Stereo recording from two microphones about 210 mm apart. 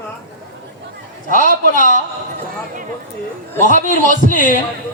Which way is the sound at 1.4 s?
40° left (ahead or behind).